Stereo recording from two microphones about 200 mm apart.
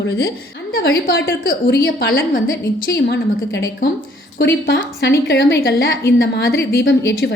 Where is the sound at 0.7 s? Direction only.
50° left (ahead or behind).